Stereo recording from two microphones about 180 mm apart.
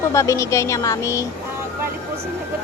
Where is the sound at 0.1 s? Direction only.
15° left (ahead or behind).